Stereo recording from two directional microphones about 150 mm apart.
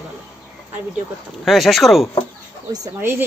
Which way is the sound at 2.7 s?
20° right (ahead or behind).